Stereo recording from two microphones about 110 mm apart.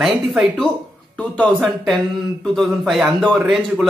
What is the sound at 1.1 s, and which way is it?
A man's voice, 10° left (ahead or behind).